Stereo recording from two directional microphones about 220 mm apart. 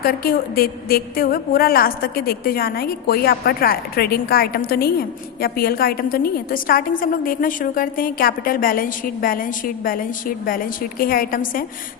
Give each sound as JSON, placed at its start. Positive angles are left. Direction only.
{"t": 0.0, "sound": "a woman's voice", "side_deg": 40}